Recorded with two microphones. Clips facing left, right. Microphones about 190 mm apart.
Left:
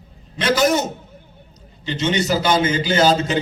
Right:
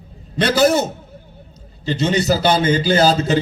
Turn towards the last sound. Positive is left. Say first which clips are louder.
# right 2 dB
turn(degrees=-35)  # may be behind; listen again after turning